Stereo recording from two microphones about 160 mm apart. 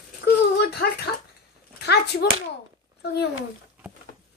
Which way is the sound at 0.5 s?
90° left.